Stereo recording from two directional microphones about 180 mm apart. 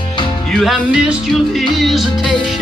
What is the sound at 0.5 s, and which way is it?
Music, 5° right (ahead or behind).